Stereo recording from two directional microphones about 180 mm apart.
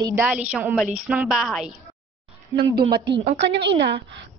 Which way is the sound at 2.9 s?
65° right (ahead or behind).